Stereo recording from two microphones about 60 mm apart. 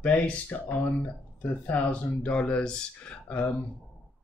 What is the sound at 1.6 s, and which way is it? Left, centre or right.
Speech, left.